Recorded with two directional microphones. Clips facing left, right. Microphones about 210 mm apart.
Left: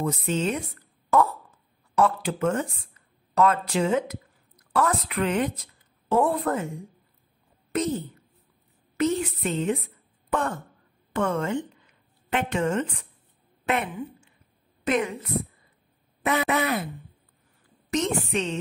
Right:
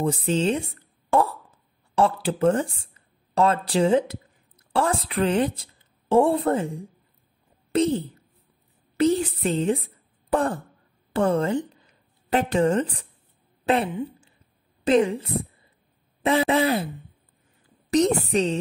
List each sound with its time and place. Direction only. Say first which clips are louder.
0.0 s a woman's voice: right 3 dB; 30° right (ahead or behind)
17.9 s speech: right 6 dB; 35° right (ahead or behind)